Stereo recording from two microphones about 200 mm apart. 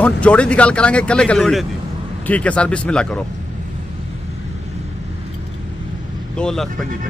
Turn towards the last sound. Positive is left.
turn(degrees=0)  # may be behind; listen again after turning